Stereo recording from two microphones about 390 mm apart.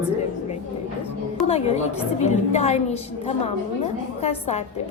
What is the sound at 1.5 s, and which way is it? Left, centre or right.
A woman's voice, centre.